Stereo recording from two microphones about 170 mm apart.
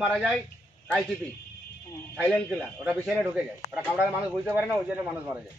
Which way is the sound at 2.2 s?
5° left (ahead or behind).